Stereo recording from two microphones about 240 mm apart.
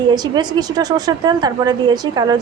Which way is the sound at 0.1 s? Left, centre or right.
Centre.